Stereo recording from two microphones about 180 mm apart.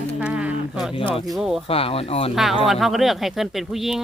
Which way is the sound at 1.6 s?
30° left (ahead or behind).